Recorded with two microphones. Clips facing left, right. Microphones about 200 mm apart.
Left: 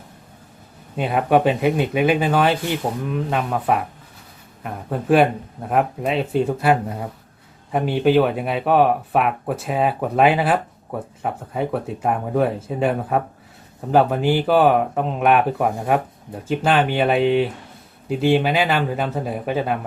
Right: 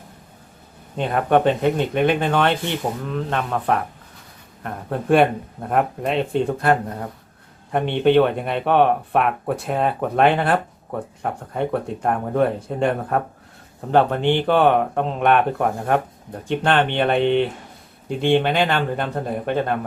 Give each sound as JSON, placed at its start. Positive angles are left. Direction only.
{"t": 0.9, "sound": "speech", "side_deg": 5}